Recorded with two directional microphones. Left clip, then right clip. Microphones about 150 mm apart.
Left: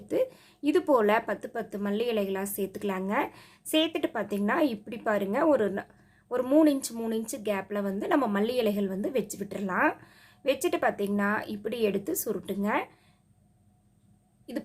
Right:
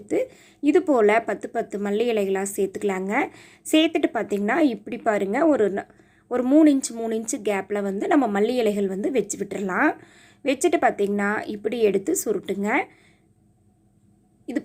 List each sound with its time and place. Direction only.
0.1 s a woman's voice: 20° right (ahead or behind)